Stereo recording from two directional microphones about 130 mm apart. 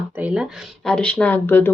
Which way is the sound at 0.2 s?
10° right (ahead or behind).